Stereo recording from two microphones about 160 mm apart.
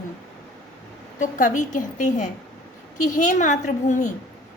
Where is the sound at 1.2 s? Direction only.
50° left (ahead or behind).